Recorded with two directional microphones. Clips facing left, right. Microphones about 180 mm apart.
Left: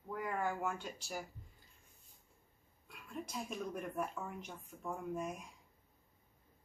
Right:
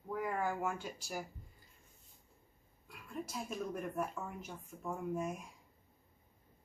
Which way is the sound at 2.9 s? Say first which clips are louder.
Right 1 dB; centre (ahead or behind).